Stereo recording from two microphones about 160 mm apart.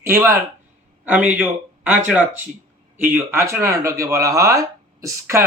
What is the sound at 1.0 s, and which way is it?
A man's voice, 10° right (ahead or behind).